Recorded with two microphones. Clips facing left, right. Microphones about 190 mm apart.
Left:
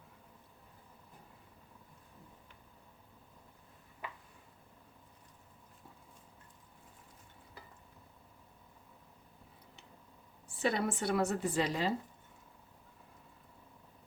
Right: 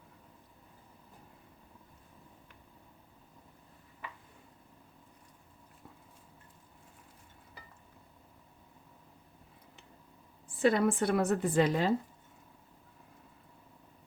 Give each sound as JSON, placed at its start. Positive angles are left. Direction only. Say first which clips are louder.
{"t": 10.6, "sound": "speech", "louder": "right 6 dB", "side_deg": -50}